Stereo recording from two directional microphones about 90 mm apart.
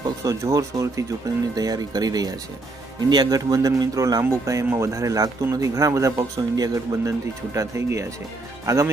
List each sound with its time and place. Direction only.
0.2 s a man's voice: 40° right (ahead or behind)